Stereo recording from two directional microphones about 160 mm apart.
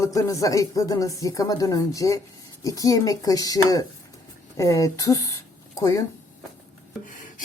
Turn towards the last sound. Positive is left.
turn(degrees=20)  # may be behind; listen again after turning